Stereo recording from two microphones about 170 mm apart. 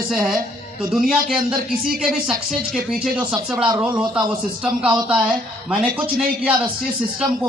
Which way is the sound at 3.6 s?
20° right (ahead or behind).